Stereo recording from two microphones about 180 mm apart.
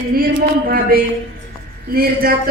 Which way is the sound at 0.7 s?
55° right (ahead or behind).